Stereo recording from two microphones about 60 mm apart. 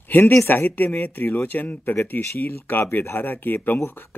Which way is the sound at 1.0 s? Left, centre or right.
Left.